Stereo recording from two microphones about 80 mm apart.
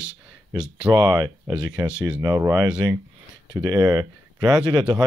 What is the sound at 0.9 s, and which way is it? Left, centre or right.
Speech, right.